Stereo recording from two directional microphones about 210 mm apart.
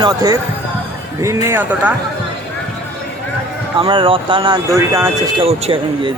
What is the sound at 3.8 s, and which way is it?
Speech, 25° right (ahead or behind).